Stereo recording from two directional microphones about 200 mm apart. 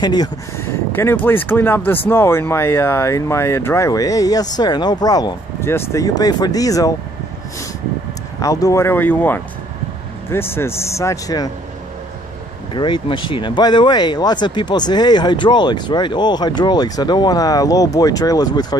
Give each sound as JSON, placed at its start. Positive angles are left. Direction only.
{"t": 0.0, "sound": "speech", "side_deg": 20}
{"t": 8.4, "sound": "speech", "side_deg": 15}
{"t": 12.7, "sound": "speech", "side_deg": 25}